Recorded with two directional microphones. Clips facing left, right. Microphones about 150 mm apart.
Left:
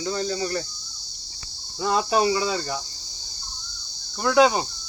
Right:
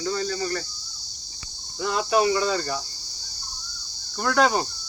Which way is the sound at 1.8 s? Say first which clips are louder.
Left 1 dB; 30° left (ahead or behind).